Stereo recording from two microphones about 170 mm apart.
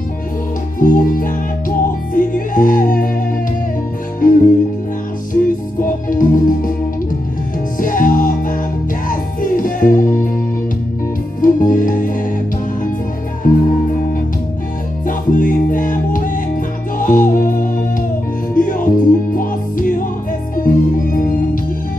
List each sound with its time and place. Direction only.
0.7 s music: 50° left (ahead or behind)
4.2 s music: 50° left (ahead or behind)
7.8 s music: 50° left (ahead or behind)
11.4 s music: 50° left (ahead or behind)
13.5 s music: 55° left (ahead or behind)
15.0 s music: 50° left (ahead or behind)